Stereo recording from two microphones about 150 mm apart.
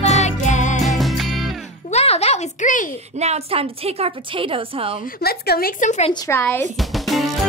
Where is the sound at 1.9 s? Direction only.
45° left (ahead or behind).